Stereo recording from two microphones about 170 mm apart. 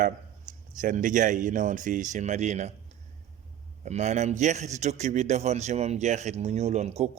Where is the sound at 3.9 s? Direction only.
40° right (ahead or behind).